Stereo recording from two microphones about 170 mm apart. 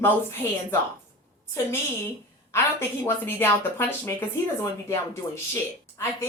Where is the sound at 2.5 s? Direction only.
15° left (ahead or behind).